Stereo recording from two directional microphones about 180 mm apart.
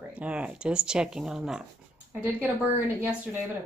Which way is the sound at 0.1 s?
5° right (ahead or behind).